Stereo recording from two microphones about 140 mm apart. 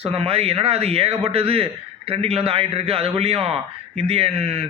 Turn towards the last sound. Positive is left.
turn(degrees=-50)  # may be behind; listen again after turning